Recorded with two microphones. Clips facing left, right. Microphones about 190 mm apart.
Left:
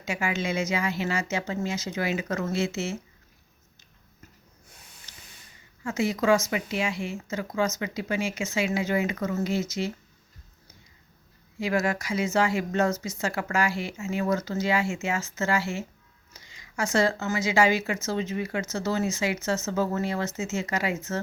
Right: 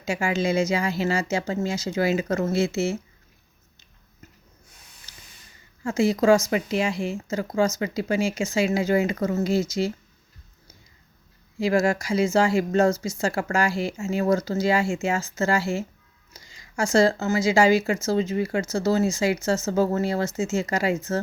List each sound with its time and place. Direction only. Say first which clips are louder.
0.0 s speech: right 5 dB; 35° right (ahead or behind)
5.8 s speech: right 5 dB; 35° right (ahead or behind)
11.6 s speech: right 5 dB; 30° right (ahead or behind)